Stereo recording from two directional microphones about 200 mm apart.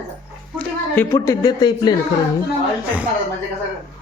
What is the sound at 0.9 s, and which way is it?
Speech, 15° left (ahead or behind).